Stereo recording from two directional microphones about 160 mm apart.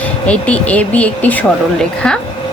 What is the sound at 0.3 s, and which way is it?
Speech, 10° left (ahead or behind).